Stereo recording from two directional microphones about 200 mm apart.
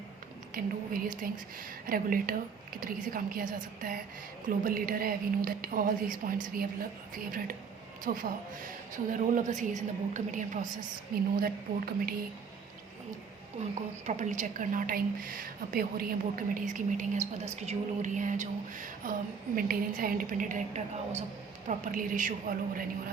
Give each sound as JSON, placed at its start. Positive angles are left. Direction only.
{"t": 0.5, "sound": "a woman's voice", "side_deg": -45}
{"t": 14.1, "sound": "a woman's voice", "side_deg": -35}